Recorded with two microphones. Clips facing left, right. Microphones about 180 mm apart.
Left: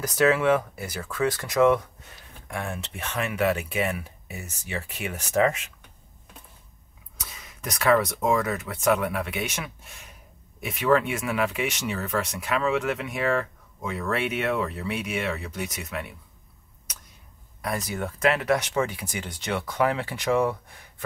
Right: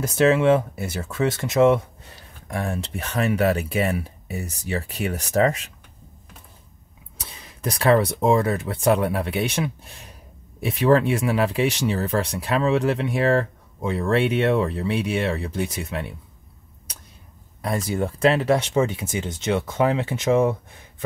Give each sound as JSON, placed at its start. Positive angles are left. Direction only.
{"t": 0.0, "sound": "speech", "side_deg": -25}
{"t": 7.2, "sound": "speech", "side_deg": -30}
{"t": 17.6, "sound": "speech", "side_deg": -30}